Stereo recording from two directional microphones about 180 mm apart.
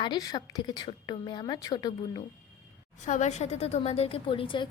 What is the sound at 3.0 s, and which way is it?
A woman's voice, 40° left (ahead or behind).